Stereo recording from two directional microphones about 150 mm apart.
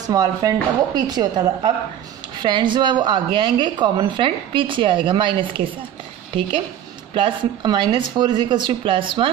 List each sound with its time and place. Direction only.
0.0 s a woman's voice: 25° right (ahead or behind)
7.2 s a woman's voice: 30° right (ahead or behind)